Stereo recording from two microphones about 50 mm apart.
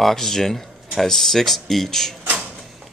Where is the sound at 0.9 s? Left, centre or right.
Centre.